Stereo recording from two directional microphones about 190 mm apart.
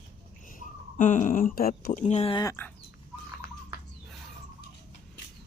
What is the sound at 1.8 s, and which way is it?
Speech, 40° left (ahead or behind).